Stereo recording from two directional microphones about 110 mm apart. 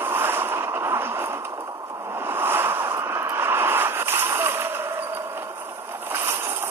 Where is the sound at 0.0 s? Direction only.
20° right (ahead or behind).